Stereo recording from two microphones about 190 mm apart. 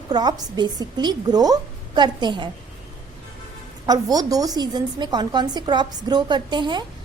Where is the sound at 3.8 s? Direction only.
20° right (ahead or behind).